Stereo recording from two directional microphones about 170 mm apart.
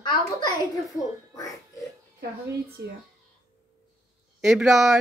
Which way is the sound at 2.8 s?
70° right (ahead or behind).